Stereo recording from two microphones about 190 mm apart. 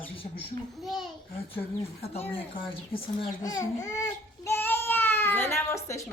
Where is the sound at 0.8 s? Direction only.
Centre (ahead or behind).